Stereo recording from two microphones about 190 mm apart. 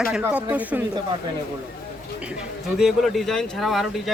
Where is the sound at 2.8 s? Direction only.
Centre (ahead or behind).